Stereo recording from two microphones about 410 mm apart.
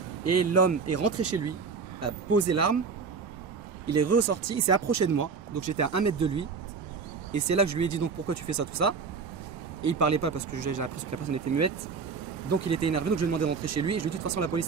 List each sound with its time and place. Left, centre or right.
0.3 s speech: right
3.8 s speech: right